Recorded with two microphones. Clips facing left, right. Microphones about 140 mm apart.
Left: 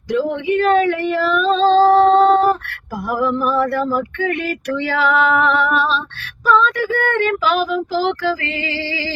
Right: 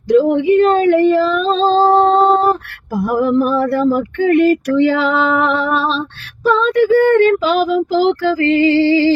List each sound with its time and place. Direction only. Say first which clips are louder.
0.2 s a woman's voice: right 6 dB; 30° right (ahead or behind)
0.5 s female singing: right 3 dB; 30° right (ahead or behind)
3.1 s child singing: right 4 dB; 40° right (ahead or behind)
3.9 s speech: right 7 dB; 40° right (ahead or behind)
4.7 s child singing: right 5 dB; 35° right (ahead or behind)